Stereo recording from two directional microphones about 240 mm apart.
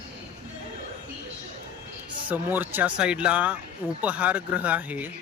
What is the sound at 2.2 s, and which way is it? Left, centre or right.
A man's voice, centre.